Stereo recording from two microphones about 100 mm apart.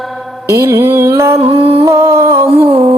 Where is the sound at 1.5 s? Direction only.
70° right (ahead or behind).